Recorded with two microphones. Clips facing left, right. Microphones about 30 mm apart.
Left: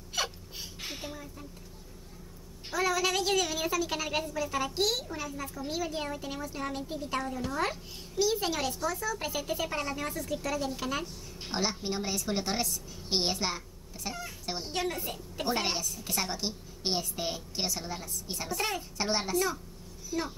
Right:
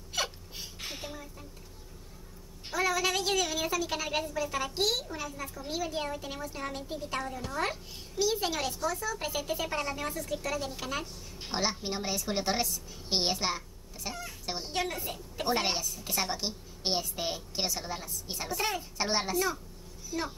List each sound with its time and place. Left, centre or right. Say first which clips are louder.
0.1 s hiccup: even; centre
2.7 s a child's voice: even; centre